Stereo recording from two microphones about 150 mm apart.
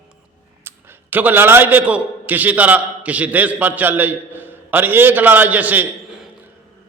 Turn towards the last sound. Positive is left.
turn(degrees=-10)  # may be behind; listen again after turning